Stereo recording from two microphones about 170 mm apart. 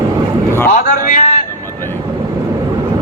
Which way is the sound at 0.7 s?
55° left (ahead or behind).